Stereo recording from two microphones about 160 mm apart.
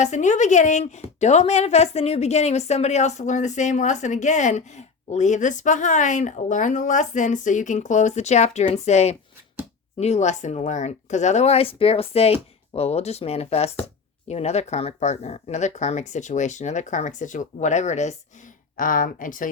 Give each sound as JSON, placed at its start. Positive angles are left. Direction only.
{"t": 0.0, "sound": "a woman's voice", "side_deg": 50}
{"t": 18.8, "sound": "speech", "side_deg": 60}